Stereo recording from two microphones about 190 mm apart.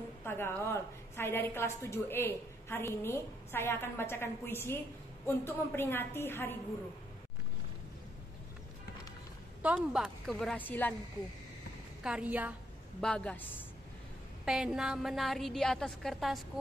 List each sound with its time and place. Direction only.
0.2 s a woman's voice: 10° left (ahead or behind)
9.6 s a woman's voice: 5° right (ahead or behind)
12.0 s a woman's voice: 5° right (ahead or behind)
13.0 s a woman's voice: 5° left (ahead or behind)
14.4 s a woman's voice: 5° right (ahead or behind)